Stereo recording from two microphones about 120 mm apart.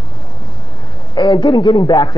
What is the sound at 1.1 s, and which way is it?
Speech, 40° left (ahead or behind).